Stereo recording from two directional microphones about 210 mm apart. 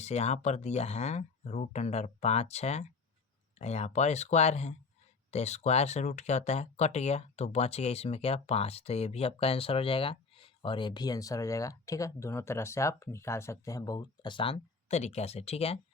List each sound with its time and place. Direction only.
0.0 s speech: 30° left (ahead or behind)